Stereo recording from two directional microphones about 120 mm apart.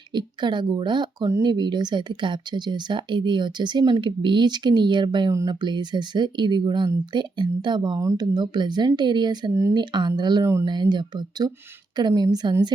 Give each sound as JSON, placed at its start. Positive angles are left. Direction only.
{"t": 0.1, "sound": "speech", "side_deg": -40}
{"t": 10.4, "sound": "speech", "side_deg": -25}
{"t": 10.7, "sound": "speech", "side_deg": -40}